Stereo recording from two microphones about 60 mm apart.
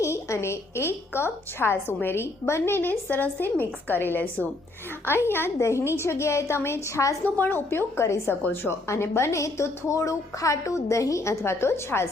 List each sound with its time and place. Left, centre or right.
0.0 s a woman's voice: left
5.0 s a woman's voice: left
5.5 s a woman's voice: left
7.3 s a woman's voice: left